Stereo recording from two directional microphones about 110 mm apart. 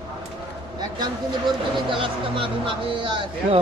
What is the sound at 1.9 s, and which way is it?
Speech, 50° right (ahead or behind).